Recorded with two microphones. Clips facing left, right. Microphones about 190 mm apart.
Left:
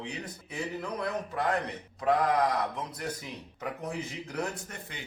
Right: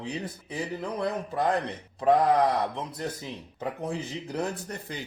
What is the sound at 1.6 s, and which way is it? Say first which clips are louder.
Speech: right 5 dB; 30° right (ahead or behind).